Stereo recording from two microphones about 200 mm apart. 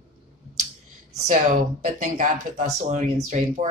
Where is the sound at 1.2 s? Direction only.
40° right (ahead or behind).